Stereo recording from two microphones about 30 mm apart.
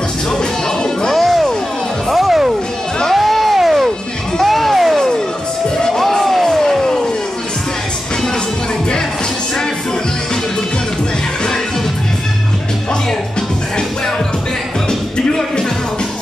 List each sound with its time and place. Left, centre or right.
1.1 s music: centre
3.1 s music: centre
4.4 s music: centre
4.9 s music: centre
14.9 s music: left